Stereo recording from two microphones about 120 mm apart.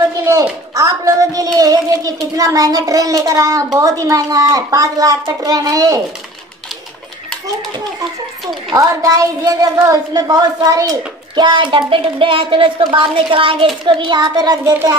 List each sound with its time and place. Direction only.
0.7 s a child's voice: 25° right (ahead or behind)
8.7 s a woman's voice: 30° right (ahead or behind)